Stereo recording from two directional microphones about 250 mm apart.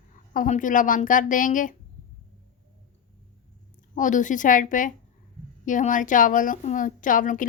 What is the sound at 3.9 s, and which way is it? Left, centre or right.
A woman's voice, left.